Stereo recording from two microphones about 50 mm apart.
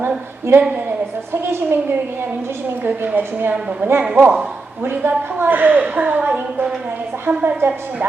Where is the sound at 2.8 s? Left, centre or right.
Right.